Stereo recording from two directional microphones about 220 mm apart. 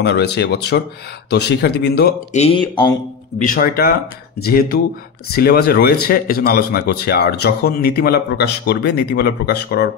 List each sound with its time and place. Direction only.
0.0 s speech: 50° left (ahead or behind)
2.3 s speech: 25° left (ahead or behind)
3.4 s speech: 40° left (ahead or behind)